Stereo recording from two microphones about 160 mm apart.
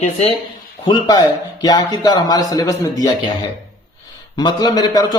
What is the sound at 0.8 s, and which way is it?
Speech, 25° left (ahead or behind).